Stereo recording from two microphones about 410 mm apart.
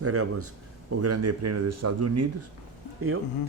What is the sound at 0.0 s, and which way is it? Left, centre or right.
Speech, right.